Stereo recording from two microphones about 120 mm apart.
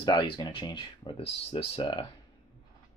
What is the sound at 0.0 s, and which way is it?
Speech, 35° left (ahead or behind).